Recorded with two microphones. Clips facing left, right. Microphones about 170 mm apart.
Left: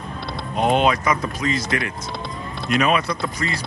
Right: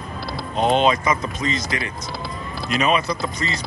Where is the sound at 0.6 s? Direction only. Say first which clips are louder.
Even; 10° left (ahead or behind).